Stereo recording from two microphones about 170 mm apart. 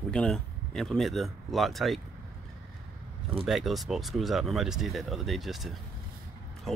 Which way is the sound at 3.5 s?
Centre (ahead or behind).